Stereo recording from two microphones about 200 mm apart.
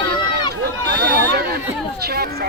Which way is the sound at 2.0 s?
50° right (ahead or behind).